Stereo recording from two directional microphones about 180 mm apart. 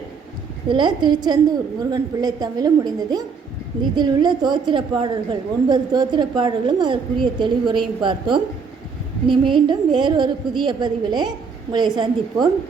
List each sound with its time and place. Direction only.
0.7 s a woman's voice: 25° right (ahead or behind)